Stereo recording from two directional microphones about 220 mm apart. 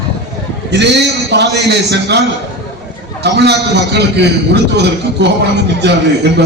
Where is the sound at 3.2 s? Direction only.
50° right (ahead or behind).